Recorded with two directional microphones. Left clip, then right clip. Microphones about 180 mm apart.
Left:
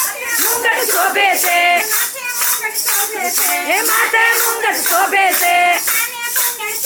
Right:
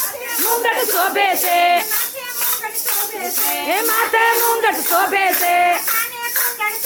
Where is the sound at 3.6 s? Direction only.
10° right (ahead or behind).